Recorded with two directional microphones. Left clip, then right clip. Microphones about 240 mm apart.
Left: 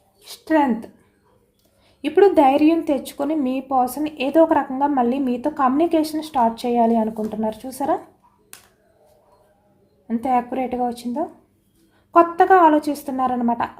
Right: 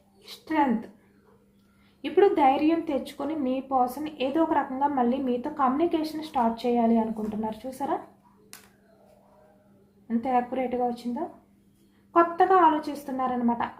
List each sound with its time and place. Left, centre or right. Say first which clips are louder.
0.3 s speech: left 7 dB; left
2.0 s a woman's voice: left 7 dB; left
10.1 s a woman's voice: left 5 dB; left